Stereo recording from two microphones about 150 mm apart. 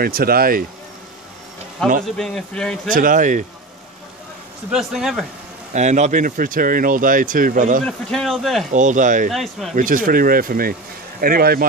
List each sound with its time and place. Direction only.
0.0 s speech: 90° right
1.8 s speech: 5° left (ahead or behind)
2.9 s speech: 65° right (ahead or behind)
4.6 s speech: centre (ahead or behind)
5.7 s speech: 50° right (ahead or behind)
7.8 s speech: 5° left (ahead or behind)
8.7 s speech: 60° right (ahead or behind)
9.3 s speech: centre (ahead or behind)
9.8 s speech: 65° right (ahead or behind); by 11.6 s 80° right